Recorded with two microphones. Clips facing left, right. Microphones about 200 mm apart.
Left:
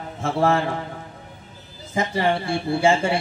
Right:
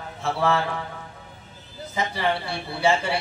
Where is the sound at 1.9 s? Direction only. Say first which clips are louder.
Left 4 dB; 50° left (ahead or behind).